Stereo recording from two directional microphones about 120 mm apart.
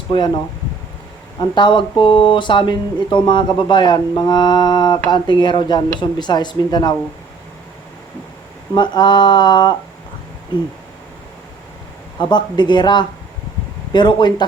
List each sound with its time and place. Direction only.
1.4 s speech: 40° left (ahead or behind)
8.7 s speech: 40° left (ahead or behind)
12.2 s speech: 40° left (ahead or behind)